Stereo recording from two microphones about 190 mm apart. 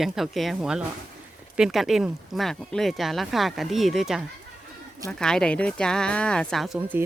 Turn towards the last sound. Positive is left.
turn(degrees=-10)  # may be behind; listen again after turning